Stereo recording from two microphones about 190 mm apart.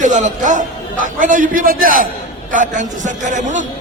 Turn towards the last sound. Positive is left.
turn(degrees=-40)  # may be behind; listen again after turning